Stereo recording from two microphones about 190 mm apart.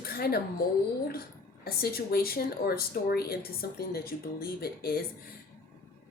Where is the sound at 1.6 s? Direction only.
55° left (ahead or behind).